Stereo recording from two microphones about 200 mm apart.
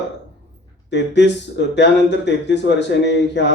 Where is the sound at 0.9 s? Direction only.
60° left (ahead or behind).